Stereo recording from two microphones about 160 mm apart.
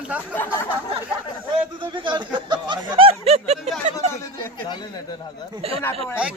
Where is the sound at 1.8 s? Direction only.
30° right (ahead or behind).